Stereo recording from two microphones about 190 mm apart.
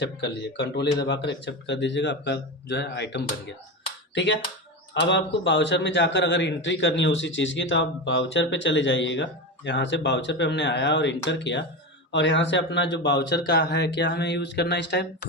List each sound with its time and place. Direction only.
0.0 s a man's voice: 65° left (ahead or behind)